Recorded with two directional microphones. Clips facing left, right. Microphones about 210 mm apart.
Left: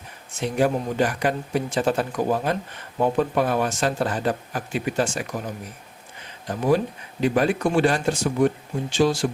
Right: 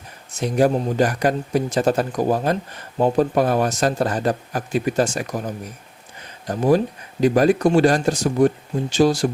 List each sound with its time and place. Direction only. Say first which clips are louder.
0.3 s speech: right 4 dB; 40° right (ahead or behind)
6.5 s speech: right 3 dB; 40° right (ahead or behind)